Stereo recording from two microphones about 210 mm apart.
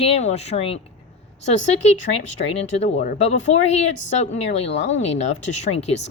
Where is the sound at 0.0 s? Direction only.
30° left (ahead or behind).